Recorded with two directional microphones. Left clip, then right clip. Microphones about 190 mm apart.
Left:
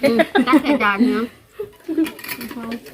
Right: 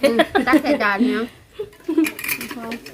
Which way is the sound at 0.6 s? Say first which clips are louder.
Left 1 dB; 10° right (ahead or behind).